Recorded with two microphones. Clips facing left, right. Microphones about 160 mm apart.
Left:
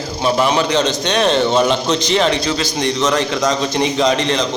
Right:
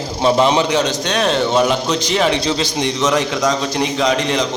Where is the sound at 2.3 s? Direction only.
25° right (ahead or behind).